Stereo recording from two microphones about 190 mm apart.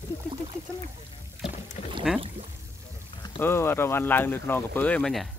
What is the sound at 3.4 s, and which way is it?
Speech, 10° left (ahead or behind).